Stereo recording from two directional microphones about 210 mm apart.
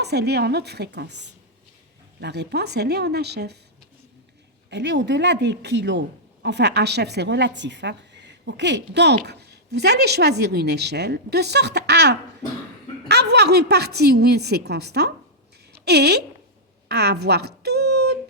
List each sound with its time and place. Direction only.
0.0 s a woman's voice: 50° right (ahead or behind)
4.7 s a woman's voice: 55° right (ahead or behind)
16.9 s a sound: 50° right (ahead or behind)